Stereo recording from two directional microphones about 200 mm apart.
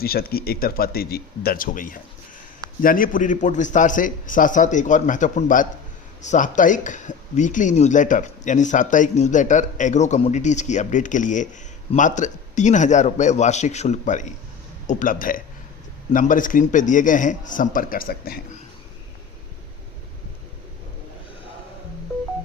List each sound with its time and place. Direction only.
0.0 s speech: 50° left (ahead or behind)